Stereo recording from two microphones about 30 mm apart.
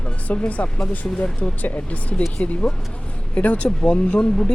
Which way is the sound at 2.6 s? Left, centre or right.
Left.